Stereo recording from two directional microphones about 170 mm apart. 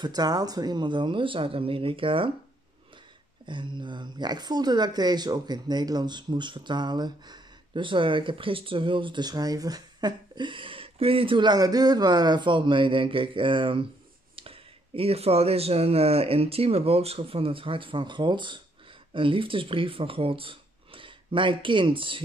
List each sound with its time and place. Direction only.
0.0 s speech: 25° right (ahead or behind)
3.4 s speech: 25° right (ahead or behind)